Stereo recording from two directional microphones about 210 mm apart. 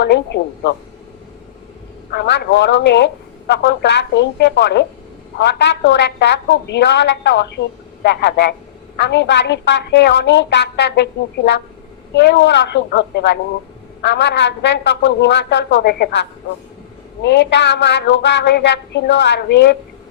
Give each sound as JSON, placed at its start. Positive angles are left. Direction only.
{"t": 0.0, "sound": "a woman's voice", "side_deg": 55}
{"t": 2.1, "sound": "a woman's voice", "side_deg": 55}
{"t": 17.2, "sound": "a woman's voice", "side_deg": 55}